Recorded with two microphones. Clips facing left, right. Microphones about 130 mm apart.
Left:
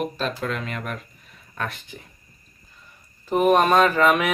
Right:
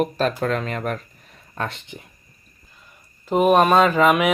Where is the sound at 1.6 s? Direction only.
25° right (ahead or behind).